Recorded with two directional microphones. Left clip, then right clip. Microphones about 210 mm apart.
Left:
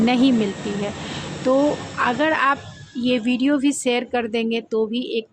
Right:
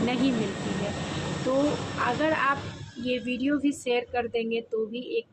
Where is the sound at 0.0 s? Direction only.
40° left (ahead or behind).